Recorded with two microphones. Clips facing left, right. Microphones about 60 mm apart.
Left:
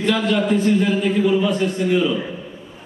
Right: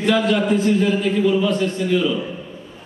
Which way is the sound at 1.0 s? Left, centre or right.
Centre.